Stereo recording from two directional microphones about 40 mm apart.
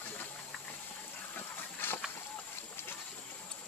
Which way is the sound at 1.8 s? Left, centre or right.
Left.